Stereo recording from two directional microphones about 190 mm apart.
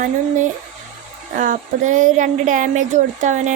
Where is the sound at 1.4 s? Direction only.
45° right (ahead or behind).